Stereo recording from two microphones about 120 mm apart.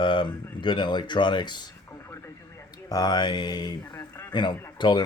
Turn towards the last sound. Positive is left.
turn(degrees=40)  # may be behind; listen again after turning